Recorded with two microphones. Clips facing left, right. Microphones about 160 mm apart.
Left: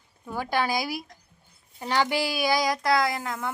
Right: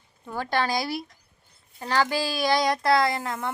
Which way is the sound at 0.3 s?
10° left (ahead or behind).